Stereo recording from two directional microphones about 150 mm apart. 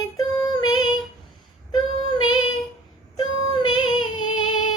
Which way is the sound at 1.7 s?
30° left (ahead or behind).